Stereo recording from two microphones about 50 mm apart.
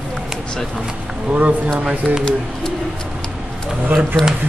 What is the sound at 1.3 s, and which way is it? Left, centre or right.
Speech, right.